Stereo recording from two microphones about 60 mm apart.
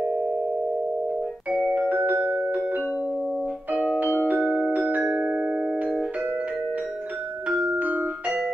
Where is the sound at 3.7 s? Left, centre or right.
Right.